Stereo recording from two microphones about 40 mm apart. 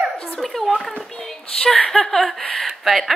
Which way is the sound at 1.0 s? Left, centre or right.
Centre.